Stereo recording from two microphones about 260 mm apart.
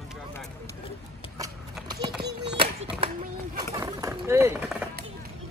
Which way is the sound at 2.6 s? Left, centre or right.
Right.